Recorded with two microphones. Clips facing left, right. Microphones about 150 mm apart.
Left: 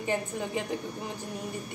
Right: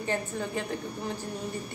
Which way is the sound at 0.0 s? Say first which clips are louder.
Even; 15° left (ahead or behind).